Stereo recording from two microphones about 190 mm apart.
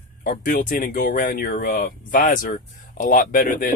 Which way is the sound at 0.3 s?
45° left (ahead or behind).